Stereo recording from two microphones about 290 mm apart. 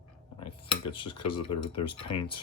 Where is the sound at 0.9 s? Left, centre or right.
Centre.